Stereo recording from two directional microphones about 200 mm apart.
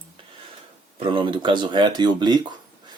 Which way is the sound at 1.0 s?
25° right (ahead or behind).